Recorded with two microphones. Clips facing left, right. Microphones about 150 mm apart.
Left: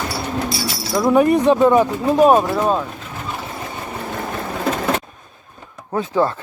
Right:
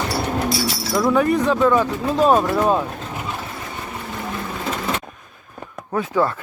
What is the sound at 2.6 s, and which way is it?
Vehicle, 5° right (ahead or behind).